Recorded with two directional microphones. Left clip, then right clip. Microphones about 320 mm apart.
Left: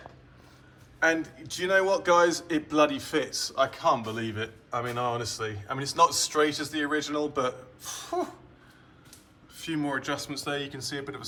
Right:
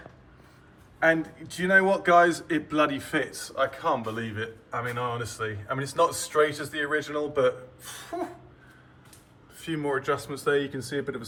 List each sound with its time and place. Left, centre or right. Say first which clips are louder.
0.9 s a man's voice: right 2 dB; centre
9.6 s a man's voice: right 2 dB; centre